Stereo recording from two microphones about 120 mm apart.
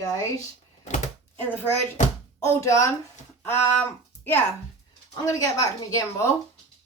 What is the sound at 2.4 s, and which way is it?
Speech, 25° left (ahead or behind).